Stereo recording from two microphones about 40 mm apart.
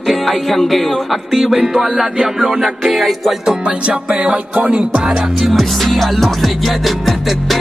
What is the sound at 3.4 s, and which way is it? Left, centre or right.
Music, centre.